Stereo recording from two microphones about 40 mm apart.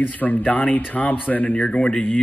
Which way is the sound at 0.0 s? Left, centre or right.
Left.